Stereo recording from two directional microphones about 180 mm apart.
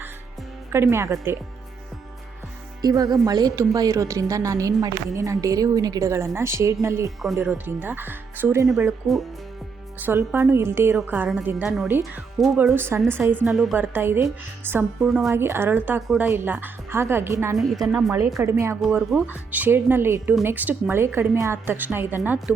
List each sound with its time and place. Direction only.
0.7 s speech: 15° right (ahead or behind)
2.8 s speech: 20° right (ahead or behind)
8.6 s speech: centre (ahead or behind)
10.0 s speech: 15° right (ahead or behind)
12.7 s speech: 10° right (ahead or behind)
13.4 s speech: centre (ahead or behind)
15.3 s speech: 15° right (ahead or behind)
17.6 s speech: centre (ahead or behind)
18.4 s speech: 15° right (ahead or behind)